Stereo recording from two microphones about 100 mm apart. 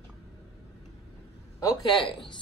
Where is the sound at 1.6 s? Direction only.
40° left (ahead or behind).